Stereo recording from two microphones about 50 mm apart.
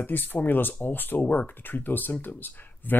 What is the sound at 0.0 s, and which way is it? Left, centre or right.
Speech, left.